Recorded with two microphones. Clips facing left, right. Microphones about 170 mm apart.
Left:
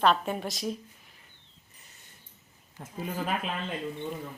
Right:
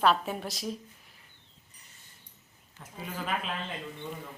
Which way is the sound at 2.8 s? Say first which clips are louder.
Left 5 dB; 50° left (ahead or behind).